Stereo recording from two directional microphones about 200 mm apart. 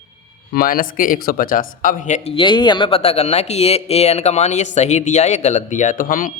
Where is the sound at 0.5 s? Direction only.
45° left (ahead or behind).